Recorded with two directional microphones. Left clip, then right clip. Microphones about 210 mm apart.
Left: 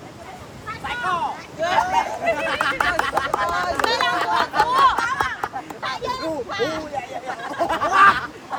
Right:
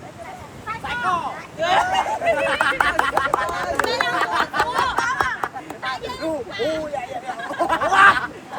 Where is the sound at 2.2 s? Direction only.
Centre (ahead or behind).